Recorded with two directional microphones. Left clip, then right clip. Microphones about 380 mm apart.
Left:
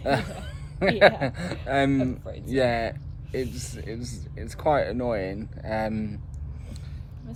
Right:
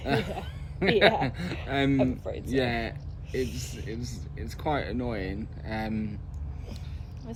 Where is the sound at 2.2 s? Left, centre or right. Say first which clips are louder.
Right 4 dB; centre.